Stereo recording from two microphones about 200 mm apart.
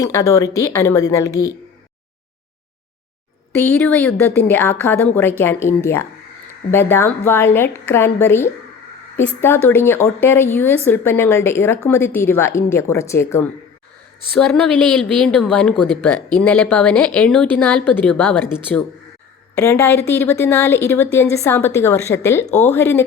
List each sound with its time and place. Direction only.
0.0 s a woman's voice: 15° left (ahead or behind)
3.5 s a woman's voice: 10° left (ahead or behind)
19.5 s a woman's voice: 15° left (ahead or behind)